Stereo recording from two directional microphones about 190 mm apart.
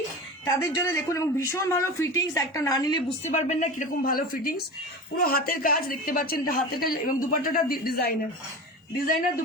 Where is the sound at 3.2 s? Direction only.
40° left (ahead or behind); by 8.1 s 55° left (ahead or behind).